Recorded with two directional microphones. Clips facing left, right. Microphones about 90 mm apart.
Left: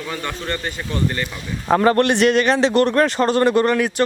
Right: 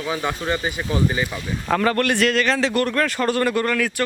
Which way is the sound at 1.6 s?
30° left (ahead or behind).